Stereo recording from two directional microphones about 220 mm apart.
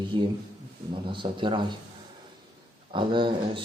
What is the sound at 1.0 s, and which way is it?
Speech, 20° right (ahead or behind).